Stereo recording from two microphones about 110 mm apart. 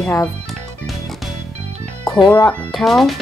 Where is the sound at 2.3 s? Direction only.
15° left (ahead or behind).